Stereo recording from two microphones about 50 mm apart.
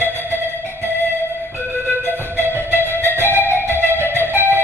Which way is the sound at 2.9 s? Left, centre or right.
Right.